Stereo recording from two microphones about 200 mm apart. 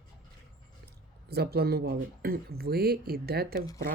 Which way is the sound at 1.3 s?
50° right (ahead or behind).